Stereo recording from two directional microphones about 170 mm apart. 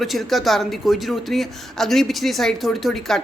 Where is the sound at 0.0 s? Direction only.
Centre (ahead or behind).